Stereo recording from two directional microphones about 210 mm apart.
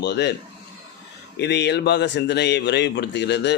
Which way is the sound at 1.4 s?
55° left (ahead or behind).